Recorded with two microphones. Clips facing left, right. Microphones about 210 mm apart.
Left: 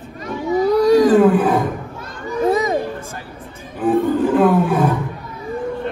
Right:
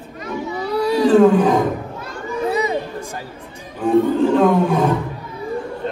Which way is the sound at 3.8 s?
5° left (ahead or behind).